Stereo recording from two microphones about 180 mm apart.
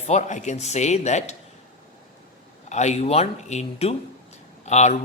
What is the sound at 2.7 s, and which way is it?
Speech, 40° left (ahead or behind).